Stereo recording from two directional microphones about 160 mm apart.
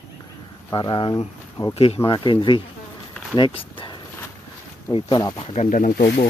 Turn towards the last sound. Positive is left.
turn(degrees=70)  # may be behind; listen again after turning